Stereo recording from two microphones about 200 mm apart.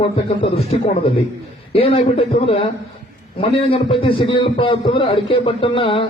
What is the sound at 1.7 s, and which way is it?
A man's voice, 30° left (ahead or behind).